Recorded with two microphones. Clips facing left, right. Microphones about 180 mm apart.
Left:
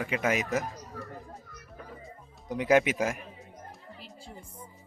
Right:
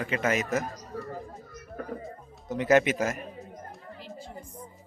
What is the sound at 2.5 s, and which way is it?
Speech, 10° left (ahead or behind).